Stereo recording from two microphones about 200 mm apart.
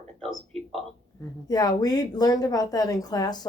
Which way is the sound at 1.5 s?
20° left (ahead or behind).